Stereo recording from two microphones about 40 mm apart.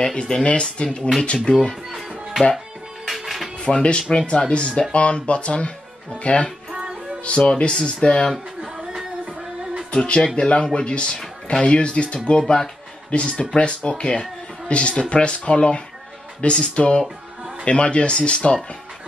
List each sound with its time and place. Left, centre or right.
0.1 s speech: left
1.9 s music: centre
3.5 s speech: left
6.7 s music: centre
7.2 s speech: left
10.0 s speech: left